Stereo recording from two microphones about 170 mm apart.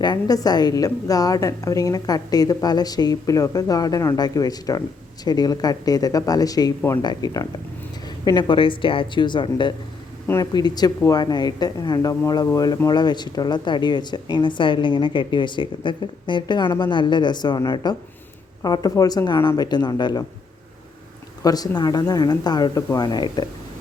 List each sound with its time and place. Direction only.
0.0 s a woman's voice: 25° left (ahead or behind)
21.4 s a woman's voice: 20° left (ahead or behind)